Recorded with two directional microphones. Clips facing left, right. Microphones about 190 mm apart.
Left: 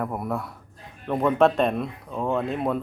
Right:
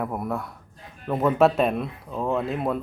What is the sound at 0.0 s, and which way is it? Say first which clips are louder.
Speech: even; centre (ahead or behind).